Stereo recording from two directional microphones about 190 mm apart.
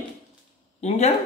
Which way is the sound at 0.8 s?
35° left (ahead or behind).